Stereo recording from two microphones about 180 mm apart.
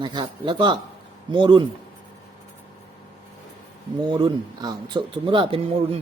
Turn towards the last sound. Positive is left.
turn(degrees=-30)  # may be behind; listen again after turning